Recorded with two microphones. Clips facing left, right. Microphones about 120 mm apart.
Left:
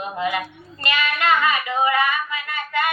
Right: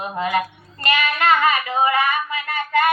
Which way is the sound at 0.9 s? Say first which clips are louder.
Right 2 dB; 40° right (ahead or behind).